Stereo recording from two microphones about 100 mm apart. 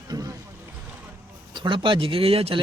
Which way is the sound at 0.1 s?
35° right (ahead or behind).